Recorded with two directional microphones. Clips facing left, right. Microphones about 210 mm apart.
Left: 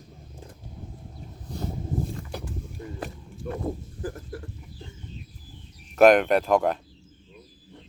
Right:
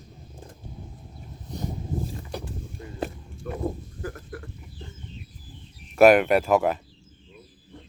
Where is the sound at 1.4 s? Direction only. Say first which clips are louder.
Even; 20° right (ahead or behind).